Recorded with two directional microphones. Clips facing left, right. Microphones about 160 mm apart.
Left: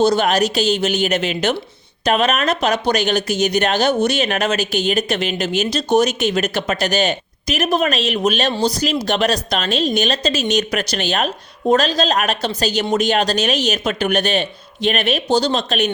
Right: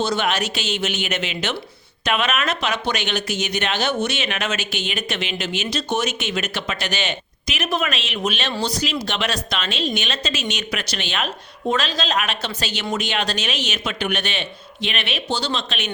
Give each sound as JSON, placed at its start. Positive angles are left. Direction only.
{"t": 0.0, "sound": "speech", "side_deg": 40}